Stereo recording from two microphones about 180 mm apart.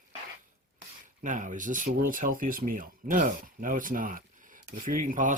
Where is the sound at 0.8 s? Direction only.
45° right (ahead or behind).